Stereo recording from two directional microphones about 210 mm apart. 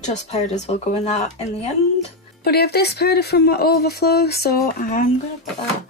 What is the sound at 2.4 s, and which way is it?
Speech, 50° left (ahead or behind).